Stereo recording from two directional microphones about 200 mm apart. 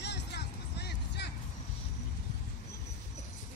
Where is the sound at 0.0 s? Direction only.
55° left (ahead or behind).